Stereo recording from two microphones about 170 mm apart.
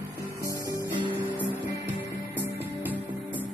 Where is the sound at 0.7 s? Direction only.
20° right (ahead or behind).